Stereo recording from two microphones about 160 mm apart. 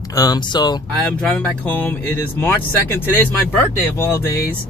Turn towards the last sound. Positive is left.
turn(degrees=15)  # may be behind; listen again after turning